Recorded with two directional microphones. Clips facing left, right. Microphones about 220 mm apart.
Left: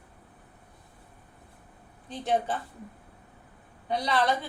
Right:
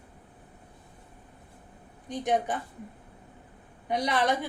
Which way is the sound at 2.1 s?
15° right (ahead or behind).